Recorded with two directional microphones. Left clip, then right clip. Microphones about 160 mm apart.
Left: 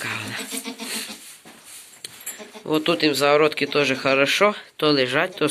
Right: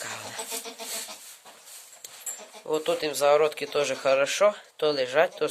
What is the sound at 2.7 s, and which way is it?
Speech, 15° right (ahead or behind).